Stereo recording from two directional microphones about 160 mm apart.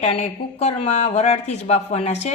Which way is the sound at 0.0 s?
45° left (ahead or behind).